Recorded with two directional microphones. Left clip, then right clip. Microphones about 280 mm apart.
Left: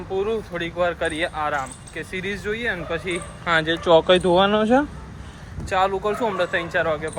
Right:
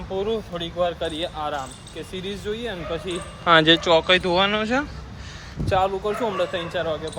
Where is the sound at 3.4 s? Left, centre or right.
Right.